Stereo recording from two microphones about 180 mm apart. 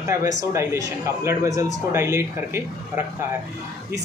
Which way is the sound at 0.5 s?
15° right (ahead or behind).